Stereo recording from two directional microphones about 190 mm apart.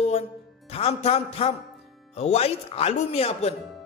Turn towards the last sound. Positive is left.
turn(degrees=30)  # may be behind; listen again after turning